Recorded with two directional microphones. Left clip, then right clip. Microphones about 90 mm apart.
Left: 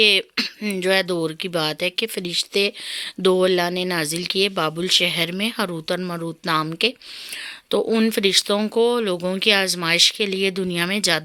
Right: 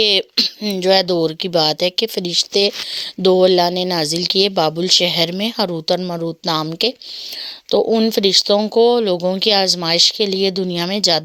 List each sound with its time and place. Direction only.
0.0 s speech: 45° right (ahead or behind)
0.3 s a sound: 20° right (ahead or behind)
0.8 s speech: 40° right (ahead or behind)
3.2 s speech: 30° right (ahead or behind)
7.9 s speech: 15° right (ahead or behind)
8.1 s speech: 25° right (ahead or behind)